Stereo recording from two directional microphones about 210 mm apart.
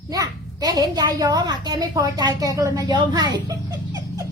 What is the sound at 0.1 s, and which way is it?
A child's voice, 15° right (ahead or behind).